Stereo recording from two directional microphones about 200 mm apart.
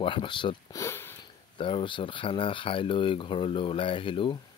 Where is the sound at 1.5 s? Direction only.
25° left (ahead or behind).